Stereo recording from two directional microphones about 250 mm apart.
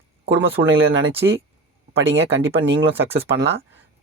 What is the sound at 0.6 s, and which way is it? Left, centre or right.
Speech, right.